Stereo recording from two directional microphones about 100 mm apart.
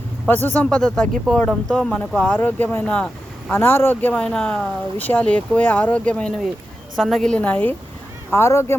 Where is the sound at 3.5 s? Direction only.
20° left (ahead or behind).